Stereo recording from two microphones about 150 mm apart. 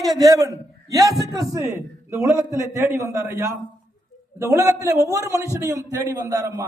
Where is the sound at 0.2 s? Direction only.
25° right (ahead or behind).